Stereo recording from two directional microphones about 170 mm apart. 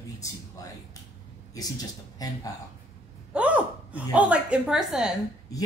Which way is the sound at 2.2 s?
20° left (ahead or behind).